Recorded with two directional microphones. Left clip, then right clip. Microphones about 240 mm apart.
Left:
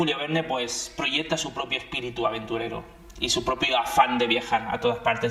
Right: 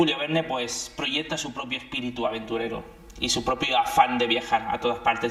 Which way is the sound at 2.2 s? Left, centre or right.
Left.